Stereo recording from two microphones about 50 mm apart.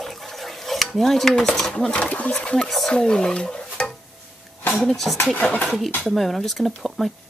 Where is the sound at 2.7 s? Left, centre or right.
Centre.